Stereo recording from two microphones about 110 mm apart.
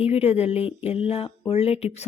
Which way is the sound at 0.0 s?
70° left (ahead or behind).